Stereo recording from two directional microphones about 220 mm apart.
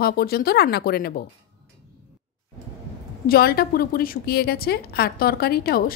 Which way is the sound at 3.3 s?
45° left (ahead or behind).